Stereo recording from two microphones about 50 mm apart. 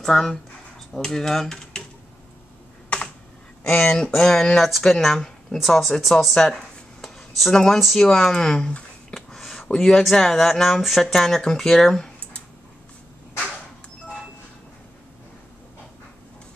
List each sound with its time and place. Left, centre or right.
0.0 s speech: centre
3.6 s speech: left
3.9 s speech: centre
4.6 s speech: centre
6.3 s a sound: centre
7.5 s speech: centre
9.1 s a sound: centre
9.8 s speech: centre